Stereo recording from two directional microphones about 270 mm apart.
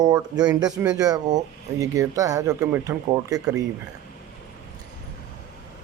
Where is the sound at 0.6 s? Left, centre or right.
Centre.